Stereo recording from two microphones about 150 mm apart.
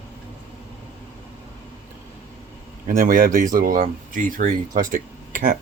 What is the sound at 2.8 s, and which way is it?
Speech, 70° right (ahead or behind).